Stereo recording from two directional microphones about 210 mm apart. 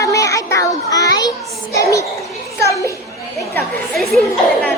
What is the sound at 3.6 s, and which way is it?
A woman's voice, centre (ahead or behind).